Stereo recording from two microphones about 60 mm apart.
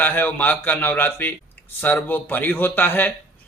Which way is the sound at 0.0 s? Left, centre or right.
Left.